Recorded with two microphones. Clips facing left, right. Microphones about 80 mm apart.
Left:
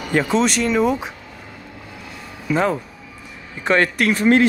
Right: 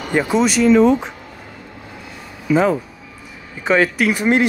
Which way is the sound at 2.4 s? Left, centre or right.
Centre.